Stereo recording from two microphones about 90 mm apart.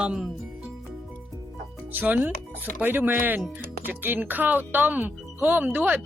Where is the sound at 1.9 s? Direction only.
20° right (ahead or behind).